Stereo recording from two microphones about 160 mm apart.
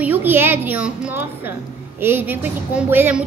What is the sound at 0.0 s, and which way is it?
A woman's voice, 10° right (ahead or behind).